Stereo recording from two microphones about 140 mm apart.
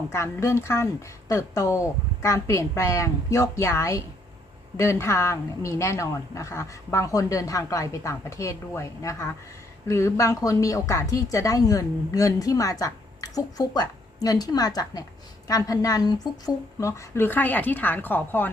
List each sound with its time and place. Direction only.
0.1 s a woman's voice: 20° left (ahead or behind)